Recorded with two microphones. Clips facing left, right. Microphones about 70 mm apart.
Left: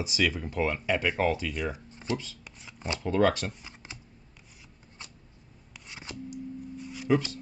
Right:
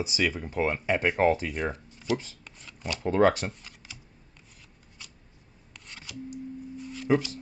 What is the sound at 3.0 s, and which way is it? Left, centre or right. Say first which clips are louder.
Speech: right 3 dB; right.